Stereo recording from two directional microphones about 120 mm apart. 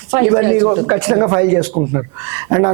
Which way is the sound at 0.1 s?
25° right (ahead or behind).